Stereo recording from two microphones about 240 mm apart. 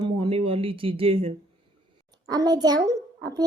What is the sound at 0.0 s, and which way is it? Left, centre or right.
A child's voice, right.